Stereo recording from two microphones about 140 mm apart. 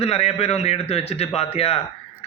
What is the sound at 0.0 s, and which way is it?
Speech, 45° left (ahead or behind).